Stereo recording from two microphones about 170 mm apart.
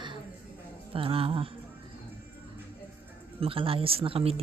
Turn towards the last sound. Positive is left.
turn(degrees=-35)  # may be behind; listen again after turning